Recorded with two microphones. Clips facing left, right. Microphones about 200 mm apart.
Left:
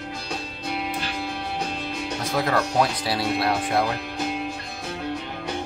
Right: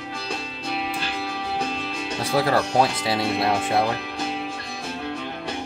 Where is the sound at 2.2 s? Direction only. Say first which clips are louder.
Right 3 dB; 30° right (ahead or behind).